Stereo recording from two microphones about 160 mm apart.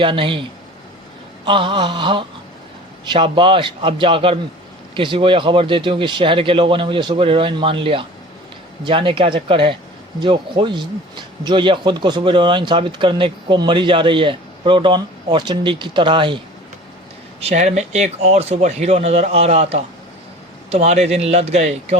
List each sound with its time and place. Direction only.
0.0 s speech: 30° right (ahead or behind)
1.5 s speech: 30° right (ahead or behind)
17.4 s speech: 45° right (ahead or behind)